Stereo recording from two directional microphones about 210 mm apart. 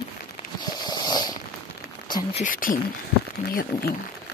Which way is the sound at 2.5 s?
40° left (ahead or behind).